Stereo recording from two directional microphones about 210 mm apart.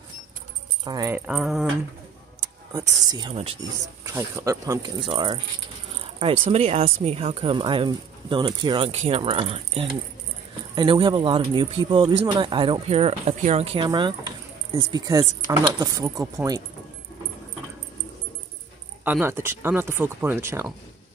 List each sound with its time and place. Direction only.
0.8 s speech: 15° right (ahead or behind)
2.7 s speech: 20° right (ahead or behind)
4.0 s speech: 15° right (ahead or behind)
19.0 s speech: 10° right (ahead or behind)